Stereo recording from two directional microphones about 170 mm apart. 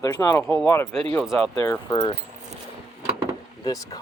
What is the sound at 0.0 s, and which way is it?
Speech, 20° left (ahead or behind).